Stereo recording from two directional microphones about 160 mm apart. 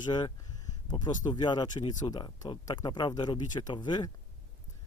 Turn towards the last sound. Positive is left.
turn(degrees=30)  # may be behind; listen again after turning